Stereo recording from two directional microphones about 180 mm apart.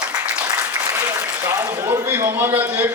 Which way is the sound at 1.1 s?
15° right (ahead or behind).